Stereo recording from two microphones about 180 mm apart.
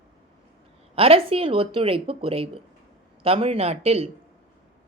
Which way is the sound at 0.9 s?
30° right (ahead or behind).